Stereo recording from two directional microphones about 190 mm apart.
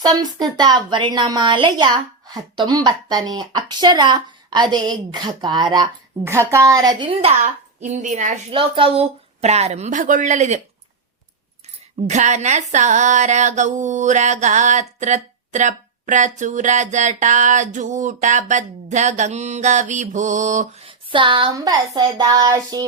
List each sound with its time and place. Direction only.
0.0 s a woman's voice: 20° right (ahead or behind); by 8.4 s 40° right (ahead or behind)
8.5 s speech: 25° right (ahead or behind)
12.0 s speech: 40° right (ahead or behind)
20.8 s a woman's voice: 25° right (ahead or behind)